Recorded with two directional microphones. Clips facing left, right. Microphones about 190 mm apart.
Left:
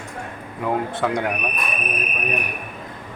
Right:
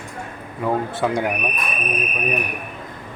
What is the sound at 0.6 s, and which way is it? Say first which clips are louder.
Speech: right 1 dB; 5° right (ahead or behind).